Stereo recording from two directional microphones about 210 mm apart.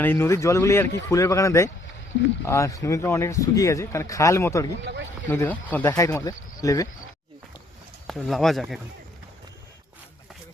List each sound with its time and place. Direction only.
0.0 s speech: 10° left (ahead or behind)
8.0 s speech: centre (ahead or behind)